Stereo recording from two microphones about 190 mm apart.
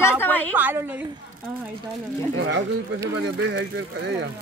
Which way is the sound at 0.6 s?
10° right (ahead or behind).